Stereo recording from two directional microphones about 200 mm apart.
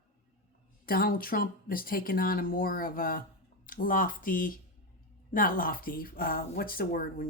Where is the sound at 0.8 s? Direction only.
45° left (ahead or behind).